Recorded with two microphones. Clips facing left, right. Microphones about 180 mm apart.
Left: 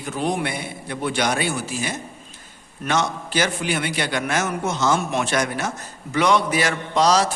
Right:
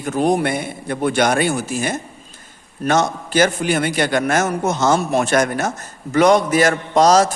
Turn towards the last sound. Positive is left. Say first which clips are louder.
# right 5 dB
turn(degrees=-45)  # may be behind; listen again after turning